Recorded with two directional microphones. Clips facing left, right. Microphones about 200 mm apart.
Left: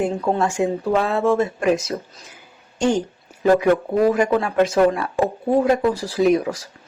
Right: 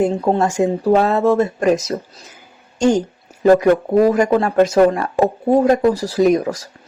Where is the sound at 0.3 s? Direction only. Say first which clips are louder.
Right 4 dB; 40° right (ahead or behind).